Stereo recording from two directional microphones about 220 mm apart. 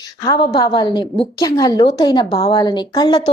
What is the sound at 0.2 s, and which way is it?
A woman's voice, 15° left (ahead or behind).